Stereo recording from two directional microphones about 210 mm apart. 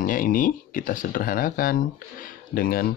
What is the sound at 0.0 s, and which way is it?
Speech, 40° left (ahead or behind).